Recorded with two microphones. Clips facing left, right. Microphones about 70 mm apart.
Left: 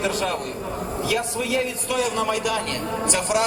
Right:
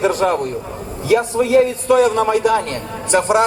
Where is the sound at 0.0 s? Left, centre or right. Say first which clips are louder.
Right 8 dB; right.